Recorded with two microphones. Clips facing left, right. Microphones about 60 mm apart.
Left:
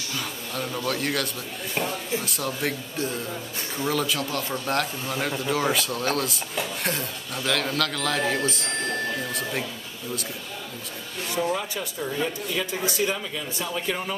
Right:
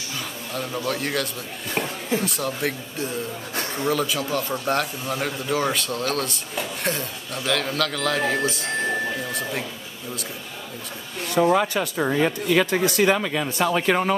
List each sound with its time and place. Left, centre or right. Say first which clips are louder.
0.6 s speech: right 1 dB; centre
8.9 s a sound: right 2 dB; centre
9.3 s speech: right 1 dB; centre
11.2 s speech: right 8 dB; right